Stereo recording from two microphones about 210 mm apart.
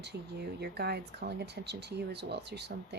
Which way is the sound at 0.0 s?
50° right (ahead or behind).